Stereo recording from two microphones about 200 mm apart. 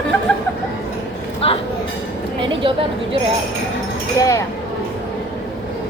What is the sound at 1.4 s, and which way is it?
Train, 30° left (ahead or behind).